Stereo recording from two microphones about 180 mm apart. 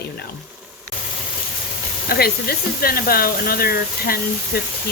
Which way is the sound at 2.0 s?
60° left (ahead or behind).